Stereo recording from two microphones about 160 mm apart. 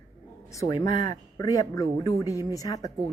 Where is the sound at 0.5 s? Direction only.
20° left (ahead or behind).